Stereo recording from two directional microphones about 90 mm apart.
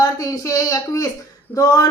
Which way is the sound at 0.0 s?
40° left (ahead or behind).